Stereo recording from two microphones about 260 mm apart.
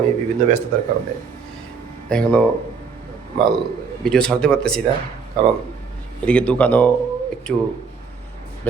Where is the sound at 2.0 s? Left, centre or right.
Centre.